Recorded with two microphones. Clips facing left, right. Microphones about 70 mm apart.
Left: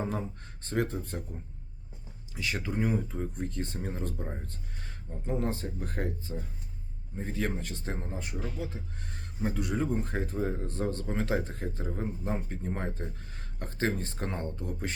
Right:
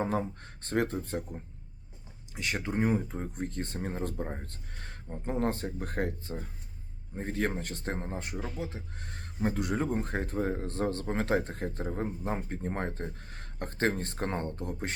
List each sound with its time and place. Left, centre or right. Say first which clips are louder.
0.0 s speech: right 3 dB; right
2.6 s speech: right 2 dB; right